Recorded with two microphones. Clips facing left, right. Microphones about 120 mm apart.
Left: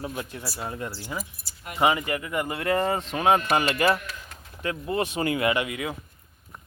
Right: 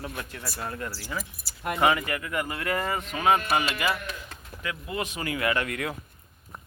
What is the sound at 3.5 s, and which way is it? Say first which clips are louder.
Speech: left 4 dB; 45° left (ahead or behind).